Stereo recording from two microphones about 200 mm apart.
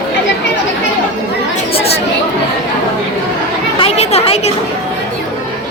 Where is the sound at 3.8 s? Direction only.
30° left (ahead or behind).